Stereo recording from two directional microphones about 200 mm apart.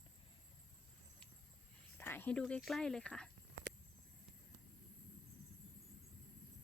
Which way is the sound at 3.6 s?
80° right.